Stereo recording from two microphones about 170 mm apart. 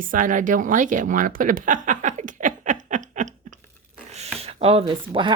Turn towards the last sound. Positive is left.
turn(degrees=-30)  # may be behind; listen again after turning